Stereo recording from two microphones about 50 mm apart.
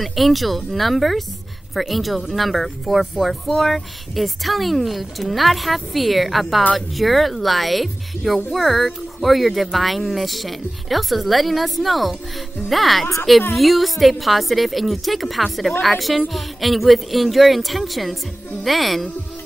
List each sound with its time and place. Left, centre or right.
0.0 s speech: centre